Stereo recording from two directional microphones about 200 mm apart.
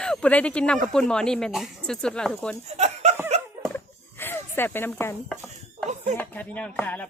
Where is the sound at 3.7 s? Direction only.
10° left (ahead or behind).